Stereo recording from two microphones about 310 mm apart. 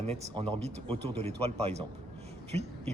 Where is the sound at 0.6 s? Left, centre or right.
Centre.